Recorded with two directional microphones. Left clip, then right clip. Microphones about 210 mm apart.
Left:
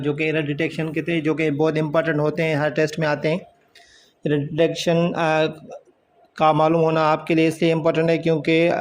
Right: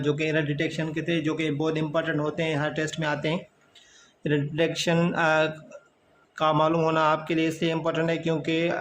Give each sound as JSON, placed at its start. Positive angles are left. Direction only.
{"t": 0.0, "sound": "speech", "side_deg": 10}